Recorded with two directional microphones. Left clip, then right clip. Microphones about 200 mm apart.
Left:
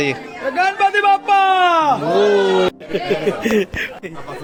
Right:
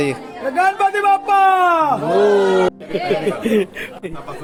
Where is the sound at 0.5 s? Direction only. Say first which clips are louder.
Even; 55° right (ahead or behind).